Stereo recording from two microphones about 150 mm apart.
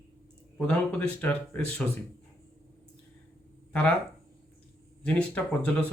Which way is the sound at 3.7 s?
5° left (ahead or behind).